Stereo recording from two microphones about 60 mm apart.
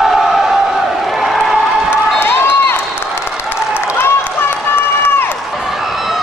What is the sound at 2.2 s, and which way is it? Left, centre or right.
Run, left.